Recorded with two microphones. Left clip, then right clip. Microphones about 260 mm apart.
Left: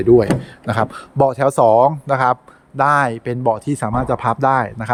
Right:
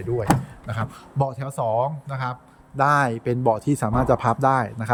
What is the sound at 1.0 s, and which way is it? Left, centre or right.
A man's voice, centre.